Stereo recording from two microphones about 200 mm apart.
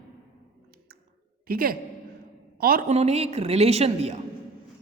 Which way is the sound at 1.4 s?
45° right (ahead or behind).